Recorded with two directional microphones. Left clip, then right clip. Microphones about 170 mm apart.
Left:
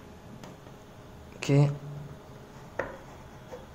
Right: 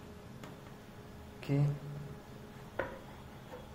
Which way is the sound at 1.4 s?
70° left (ahead or behind).